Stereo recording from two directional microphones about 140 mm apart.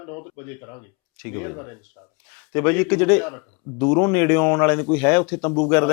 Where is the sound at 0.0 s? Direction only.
15° left (ahead or behind).